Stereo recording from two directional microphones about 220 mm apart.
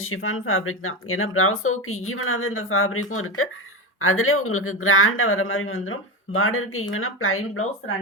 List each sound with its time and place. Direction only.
0.0 s speech: 65° left (ahead or behind)